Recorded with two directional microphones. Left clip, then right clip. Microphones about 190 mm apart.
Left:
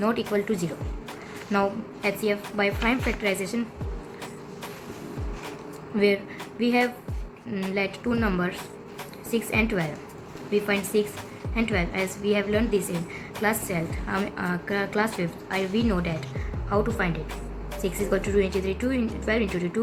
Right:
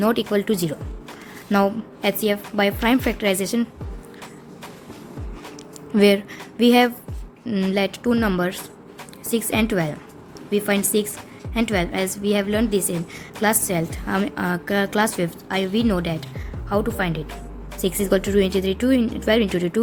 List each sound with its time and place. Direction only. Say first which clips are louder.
0.0 s a woman's voice: right 5 dB; 55° right (ahead or behind)
6.6 s speech: right 8 dB; 70° right (ahead or behind)